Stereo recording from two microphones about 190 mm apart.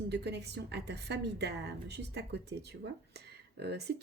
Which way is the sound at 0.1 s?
60° right (ahead or behind).